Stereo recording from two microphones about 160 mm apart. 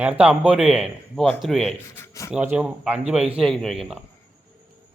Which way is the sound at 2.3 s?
10° right (ahead or behind).